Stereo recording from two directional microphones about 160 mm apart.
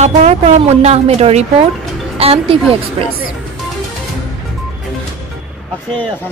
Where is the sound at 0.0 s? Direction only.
45° right (ahead or behind).